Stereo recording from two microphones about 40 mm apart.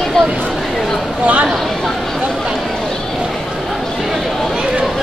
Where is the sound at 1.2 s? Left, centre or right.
Right.